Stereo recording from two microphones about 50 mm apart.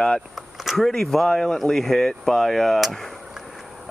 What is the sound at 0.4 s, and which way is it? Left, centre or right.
Speech, centre.